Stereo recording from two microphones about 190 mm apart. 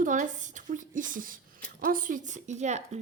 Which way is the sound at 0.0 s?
40° right (ahead or behind).